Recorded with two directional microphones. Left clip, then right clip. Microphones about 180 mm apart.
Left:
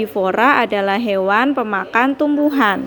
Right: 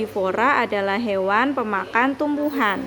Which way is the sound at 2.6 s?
30° left (ahead or behind).